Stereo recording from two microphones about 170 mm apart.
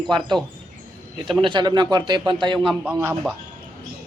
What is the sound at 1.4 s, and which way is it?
A man's voice, 25° right (ahead or behind).